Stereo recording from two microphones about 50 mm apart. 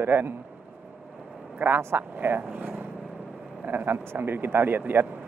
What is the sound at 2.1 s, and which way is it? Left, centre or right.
Speech, right.